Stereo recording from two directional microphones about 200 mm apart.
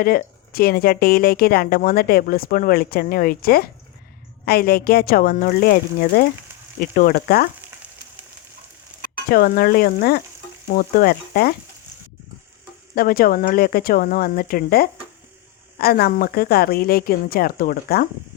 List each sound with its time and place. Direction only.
0.0 s speech: 45° left (ahead or behind)
9.3 s speech: 50° left (ahead or behind)
13.0 s speech: 45° left (ahead or behind)